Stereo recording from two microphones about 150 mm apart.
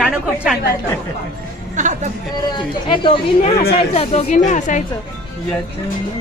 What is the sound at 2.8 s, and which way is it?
Speech, 35° left (ahead or behind).